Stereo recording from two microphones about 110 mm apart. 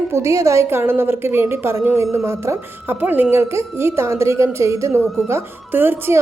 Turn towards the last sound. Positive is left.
turn(degrees=-20)  # may be behind; listen again after turning